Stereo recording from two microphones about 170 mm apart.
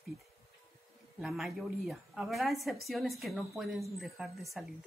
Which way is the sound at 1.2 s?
Centre (ahead or behind).